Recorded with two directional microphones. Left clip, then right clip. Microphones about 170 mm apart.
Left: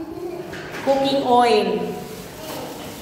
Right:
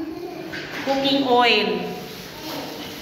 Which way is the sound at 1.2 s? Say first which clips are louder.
Even; centre (ahead or behind).